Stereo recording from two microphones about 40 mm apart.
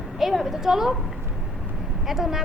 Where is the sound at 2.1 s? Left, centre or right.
Centre.